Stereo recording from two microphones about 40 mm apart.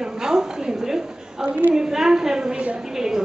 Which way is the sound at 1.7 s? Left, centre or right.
Centre.